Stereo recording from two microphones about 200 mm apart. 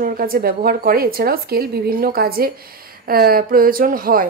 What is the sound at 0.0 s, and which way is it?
Speech, 45° right (ahead or behind).